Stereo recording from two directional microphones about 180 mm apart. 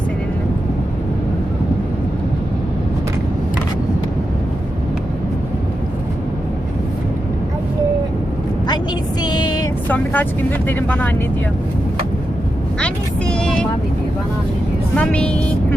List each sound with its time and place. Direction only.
9.2 s music: 25° left (ahead or behind)
9.9 s speech: 10° left (ahead or behind)
12.8 s vehicle: 5° left (ahead or behind)
14.9 s speech: 5° left (ahead or behind)